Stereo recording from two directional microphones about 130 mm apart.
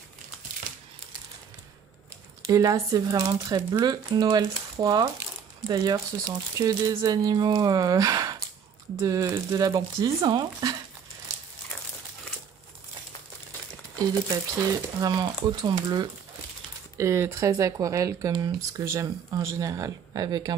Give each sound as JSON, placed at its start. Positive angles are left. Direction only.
{"t": 2.4, "sound": "speech", "side_deg": -30}
{"t": 13.9, "sound": "speech", "side_deg": -25}
{"t": 16.9, "sound": "speech", "side_deg": -20}